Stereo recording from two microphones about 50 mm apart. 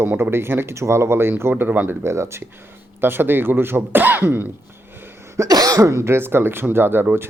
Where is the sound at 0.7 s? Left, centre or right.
Right.